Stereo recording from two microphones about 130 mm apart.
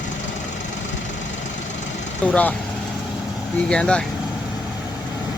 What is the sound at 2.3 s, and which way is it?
Speech, 10° left (ahead or behind).